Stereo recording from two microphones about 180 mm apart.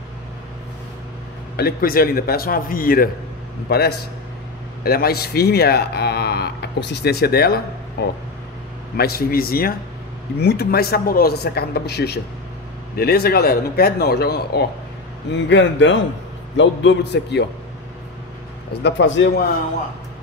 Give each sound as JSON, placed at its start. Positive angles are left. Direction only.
{"t": 1.6, "sound": "speech", "side_deg": 55}
{"t": 3.6, "sound": "speech", "side_deg": 60}
{"t": 15.3, "sound": "a man's voice", "side_deg": 85}
{"t": 18.7, "sound": "a man's voice", "side_deg": 70}